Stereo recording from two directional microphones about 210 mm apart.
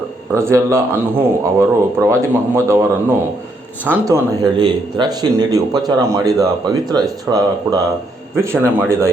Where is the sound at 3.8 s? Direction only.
15° right (ahead or behind).